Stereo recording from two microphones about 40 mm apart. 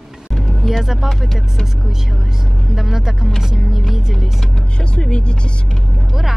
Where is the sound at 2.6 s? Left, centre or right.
Centre.